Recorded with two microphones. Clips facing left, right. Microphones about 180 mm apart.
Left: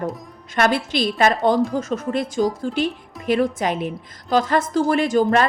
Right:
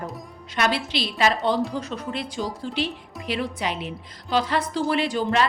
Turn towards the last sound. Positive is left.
turn(degrees=45)  # may be behind; listen again after turning